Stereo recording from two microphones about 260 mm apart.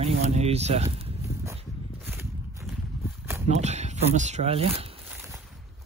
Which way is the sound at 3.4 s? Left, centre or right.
Right.